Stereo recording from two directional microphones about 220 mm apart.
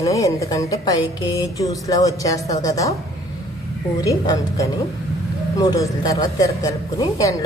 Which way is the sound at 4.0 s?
15° left (ahead or behind).